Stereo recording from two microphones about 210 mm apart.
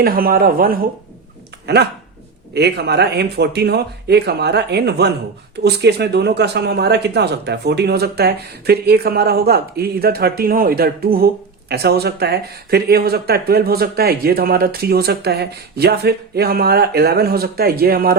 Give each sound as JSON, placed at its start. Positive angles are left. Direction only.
{"t": 0.0, "sound": "speech", "side_deg": -45}